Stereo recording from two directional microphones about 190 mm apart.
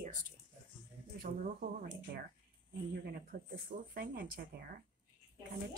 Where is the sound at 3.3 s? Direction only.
45° right (ahead or behind).